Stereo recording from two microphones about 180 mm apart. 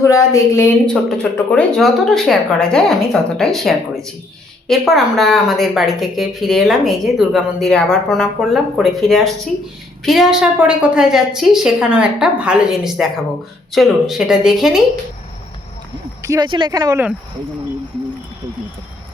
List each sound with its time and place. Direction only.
0.0 s a woman's voice: 15° left (ahead or behind)
1.1 s a woman's voice: 5° left (ahead or behind)
16.2 s speech: 20° right (ahead or behind)